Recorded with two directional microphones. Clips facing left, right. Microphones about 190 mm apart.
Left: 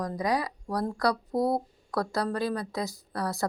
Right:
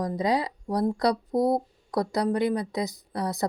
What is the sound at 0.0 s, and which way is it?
Speech, 25° right (ahead or behind).